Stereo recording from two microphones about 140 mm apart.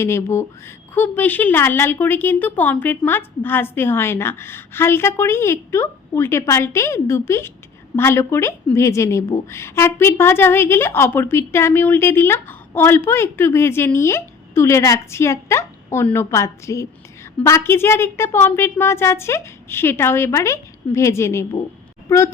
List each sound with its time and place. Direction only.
0.0 s a woman's voice: 20° left (ahead or behind)